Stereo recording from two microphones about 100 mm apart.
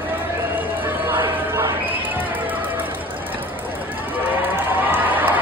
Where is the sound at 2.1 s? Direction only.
15° right (ahead or behind).